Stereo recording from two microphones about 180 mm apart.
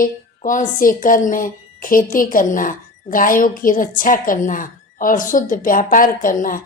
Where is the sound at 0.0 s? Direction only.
45° left (ahead or behind).